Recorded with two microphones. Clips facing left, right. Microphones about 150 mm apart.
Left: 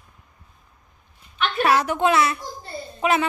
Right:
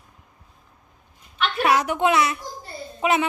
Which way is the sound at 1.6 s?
15° right (ahead or behind).